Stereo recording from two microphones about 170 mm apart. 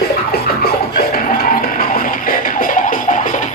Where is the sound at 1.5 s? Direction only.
55° left (ahead or behind).